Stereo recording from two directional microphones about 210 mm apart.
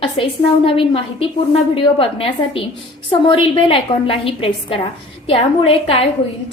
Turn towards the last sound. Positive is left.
turn(degrees=25)  # may be behind; listen again after turning